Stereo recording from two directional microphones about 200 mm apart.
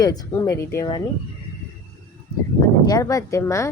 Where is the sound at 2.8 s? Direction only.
15° left (ahead or behind).